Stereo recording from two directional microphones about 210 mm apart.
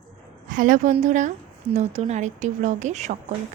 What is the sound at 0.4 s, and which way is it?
A woman's voice, 40° right (ahead or behind).